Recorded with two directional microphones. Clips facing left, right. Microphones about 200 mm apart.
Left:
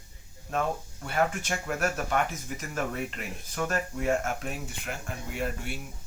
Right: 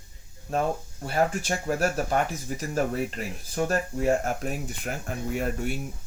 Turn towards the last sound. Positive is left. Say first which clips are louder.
# right 5 dB
turn(degrees=-40)  # may be behind; listen again after turning